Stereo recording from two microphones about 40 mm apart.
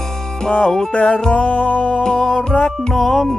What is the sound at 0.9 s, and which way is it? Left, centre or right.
Music, left.